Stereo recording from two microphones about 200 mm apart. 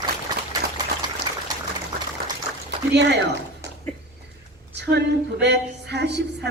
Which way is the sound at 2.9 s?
60° right (ahead or behind).